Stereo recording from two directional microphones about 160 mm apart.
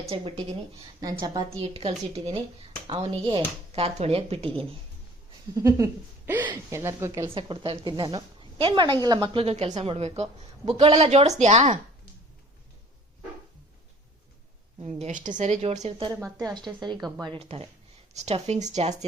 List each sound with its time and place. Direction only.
0.0 s a woman's voice: 35° right (ahead or behind)
1.0 s a woman's voice: 25° right (ahead or behind)
5.5 s speech: 20° right (ahead or behind)
7.3 s a woman's voice: 30° right (ahead or behind)
15.0 s speech: 50° right (ahead or behind)
16.0 s a woman's voice: 20° right (ahead or behind)
17.2 s a woman's voice: 30° right (ahead or behind)